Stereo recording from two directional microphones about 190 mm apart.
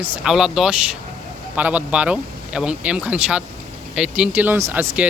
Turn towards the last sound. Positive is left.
turn(degrees=-10)  # may be behind; listen again after turning